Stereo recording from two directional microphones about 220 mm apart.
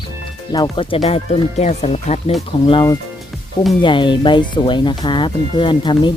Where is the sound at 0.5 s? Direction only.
20° left (ahead or behind).